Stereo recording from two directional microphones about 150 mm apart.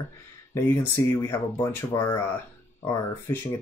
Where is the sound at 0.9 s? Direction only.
20° left (ahead or behind).